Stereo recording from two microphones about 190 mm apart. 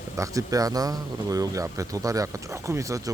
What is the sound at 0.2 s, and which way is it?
A man's voice, 15° right (ahead or behind).